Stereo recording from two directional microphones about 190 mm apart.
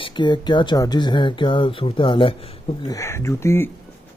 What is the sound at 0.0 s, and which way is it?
Speech, 25° left (ahead or behind).